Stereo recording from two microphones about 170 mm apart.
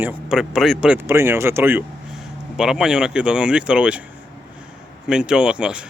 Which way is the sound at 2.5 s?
5° right (ahead or behind).